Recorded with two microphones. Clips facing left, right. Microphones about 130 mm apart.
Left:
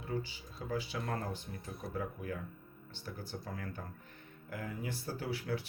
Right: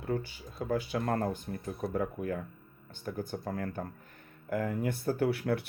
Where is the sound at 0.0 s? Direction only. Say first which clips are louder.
Right 5 dB; 55° right (ahead or behind).